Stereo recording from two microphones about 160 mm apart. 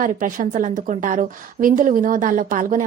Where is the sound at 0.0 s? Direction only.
55° right (ahead or behind).